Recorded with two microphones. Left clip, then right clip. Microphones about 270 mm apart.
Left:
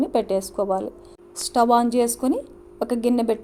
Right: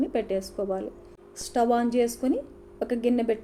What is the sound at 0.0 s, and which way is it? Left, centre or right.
A woman's voice, left.